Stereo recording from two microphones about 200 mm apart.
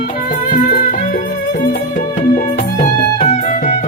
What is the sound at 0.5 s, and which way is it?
Music, 45° left (ahead or behind).